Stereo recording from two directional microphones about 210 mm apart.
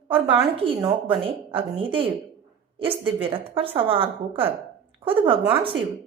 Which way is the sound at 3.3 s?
25° right (ahead or behind).